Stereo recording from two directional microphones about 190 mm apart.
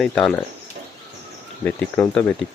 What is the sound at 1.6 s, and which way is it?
Speech, 5° left (ahead or behind).